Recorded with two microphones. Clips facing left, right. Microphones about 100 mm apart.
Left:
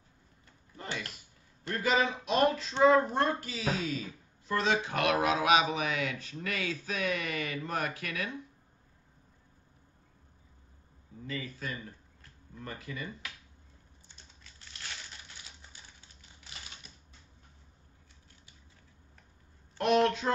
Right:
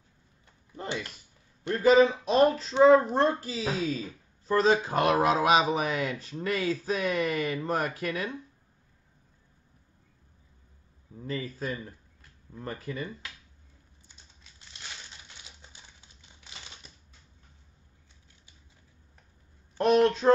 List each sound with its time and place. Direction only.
1.7 s speech: 35° right (ahead or behind)
11.2 s speech: 35° right (ahead or behind)
14.4 s crushing: 20° right (ahead or behind)
19.8 s a sound: 35° right (ahead or behind)